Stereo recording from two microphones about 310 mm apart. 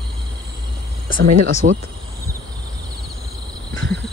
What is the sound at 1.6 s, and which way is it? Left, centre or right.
Speech, right.